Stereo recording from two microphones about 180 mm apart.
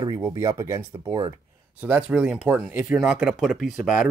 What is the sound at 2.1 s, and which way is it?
Speech, 5° right (ahead or behind).